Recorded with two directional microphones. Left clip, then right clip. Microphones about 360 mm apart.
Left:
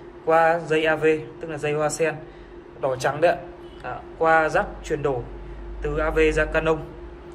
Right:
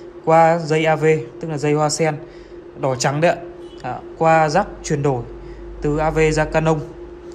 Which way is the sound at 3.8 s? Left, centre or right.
Centre.